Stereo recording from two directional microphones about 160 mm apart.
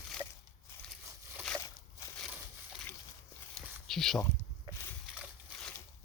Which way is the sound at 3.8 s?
Centre (ahead or behind).